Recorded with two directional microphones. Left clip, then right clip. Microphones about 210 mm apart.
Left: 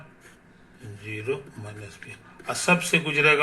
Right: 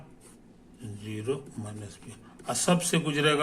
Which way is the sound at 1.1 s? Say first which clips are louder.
Left 3 dB; 20° right (ahead or behind).